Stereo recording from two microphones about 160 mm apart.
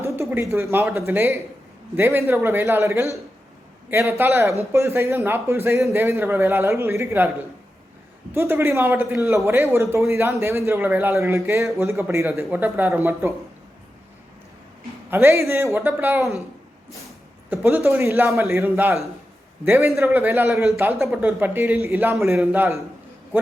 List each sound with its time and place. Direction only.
0.0 s a sound: 15° right (ahead or behind)
0.5 s a man's voice: 15° right (ahead or behind)
8.3 s a man's voice: 15° right (ahead or behind)
15.1 s a man's voice: 15° right (ahead or behind)
17.5 s a man's voice: 15° right (ahead or behind)